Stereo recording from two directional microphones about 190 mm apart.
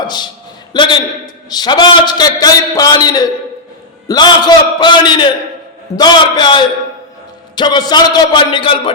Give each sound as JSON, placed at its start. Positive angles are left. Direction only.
{"t": 0.7, "sound": "a man's voice", "side_deg": 25}